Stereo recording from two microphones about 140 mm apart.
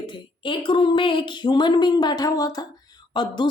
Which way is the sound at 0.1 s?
35° left (ahead or behind).